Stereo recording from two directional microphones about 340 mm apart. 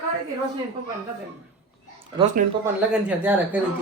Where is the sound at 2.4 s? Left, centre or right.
Right.